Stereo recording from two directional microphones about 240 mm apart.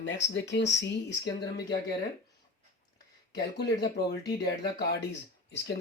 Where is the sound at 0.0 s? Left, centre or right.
Left.